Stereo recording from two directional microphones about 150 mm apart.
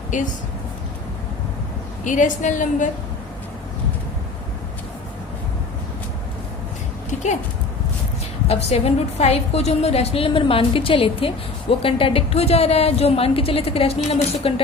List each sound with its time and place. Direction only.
2.0 s a woman's voice: 55° left (ahead or behind)
7.1 s speech: 50° left (ahead or behind)
8.4 s a woman's voice: 45° left (ahead or behind)